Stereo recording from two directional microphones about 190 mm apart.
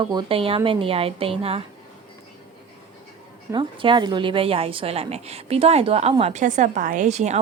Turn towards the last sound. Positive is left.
turn(degrees=-35)  # may be behind; listen again after turning